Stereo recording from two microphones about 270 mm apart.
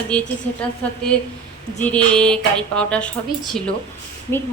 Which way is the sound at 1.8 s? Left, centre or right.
Centre.